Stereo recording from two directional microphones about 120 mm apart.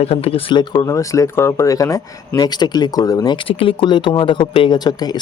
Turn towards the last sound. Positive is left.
turn(degrees=35)  # may be behind; listen again after turning